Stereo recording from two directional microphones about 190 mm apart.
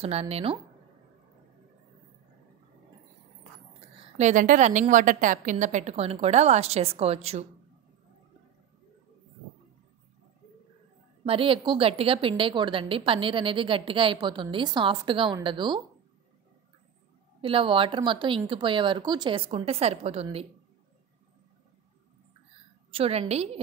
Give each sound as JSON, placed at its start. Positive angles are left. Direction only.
{"t": 0.0, "sound": "a woman's voice", "side_deg": -30}
{"t": 4.2, "sound": "a woman's voice", "side_deg": -40}
{"t": 11.2, "sound": "a woman's voice", "side_deg": -30}
{"t": 17.4, "sound": "a woman's voice", "side_deg": -30}
{"t": 22.8, "sound": "a woman's voice", "side_deg": -30}